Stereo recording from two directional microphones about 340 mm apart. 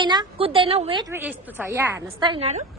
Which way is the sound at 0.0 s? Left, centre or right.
Centre.